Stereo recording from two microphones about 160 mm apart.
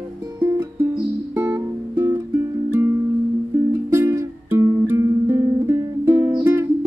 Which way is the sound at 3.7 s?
20° right (ahead or behind).